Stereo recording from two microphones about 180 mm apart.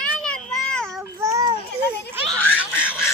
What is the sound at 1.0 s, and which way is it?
Child singing, 15° right (ahead or behind).